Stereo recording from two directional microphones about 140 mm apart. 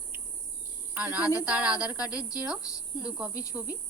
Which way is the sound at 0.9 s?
10° right (ahead or behind).